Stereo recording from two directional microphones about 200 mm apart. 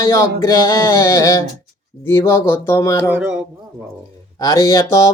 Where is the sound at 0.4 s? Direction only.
15° left (ahead or behind).